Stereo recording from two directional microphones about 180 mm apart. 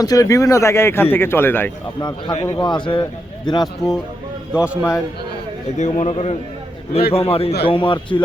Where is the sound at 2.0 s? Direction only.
25° left (ahead or behind).